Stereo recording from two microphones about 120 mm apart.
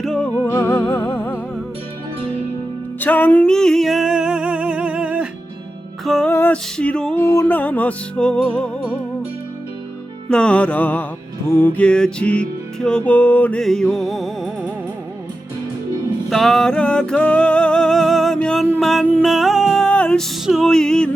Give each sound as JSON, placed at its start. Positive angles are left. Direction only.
{"t": 0.0, "sound": "music", "side_deg": 5}
{"t": 0.5, "sound": "music", "side_deg": 20}
{"t": 3.0, "sound": "music", "side_deg": 15}
{"t": 6.1, "sound": "music", "side_deg": 5}
{"t": 6.3, "sound": "music", "side_deg": 15}
{"t": 7.2, "sound": "music", "side_deg": 25}
{"t": 7.5, "sound": "music", "side_deg": 15}
{"t": 10.2, "sound": "music", "side_deg": 5}
{"t": 16.3, "sound": "music", "side_deg": 0}
{"t": 19.8, "sound": "music", "side_deg": 5}